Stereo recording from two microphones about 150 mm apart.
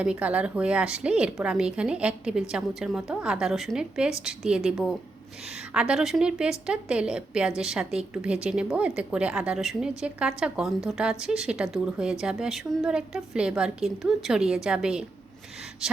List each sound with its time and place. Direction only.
0.0 s a woman's voice: 10° right (ahead or behind)